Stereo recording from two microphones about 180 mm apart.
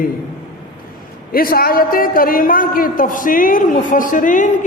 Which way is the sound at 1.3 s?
55° left (ahead or behind).